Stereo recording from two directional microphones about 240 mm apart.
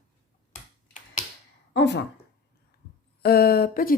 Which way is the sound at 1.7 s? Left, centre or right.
Left.